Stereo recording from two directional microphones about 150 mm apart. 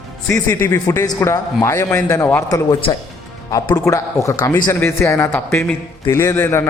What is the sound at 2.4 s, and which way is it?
A man's voice, 25° left (ahead or behind).